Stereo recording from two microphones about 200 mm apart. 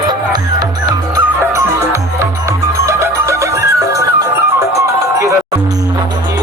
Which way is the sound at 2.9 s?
15° right (ahead or behind).